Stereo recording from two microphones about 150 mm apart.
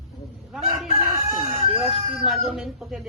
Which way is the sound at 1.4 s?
40° right (ahead or behind).